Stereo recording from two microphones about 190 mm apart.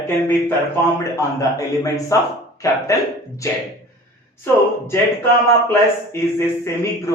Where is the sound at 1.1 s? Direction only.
15° left (ahead or behind).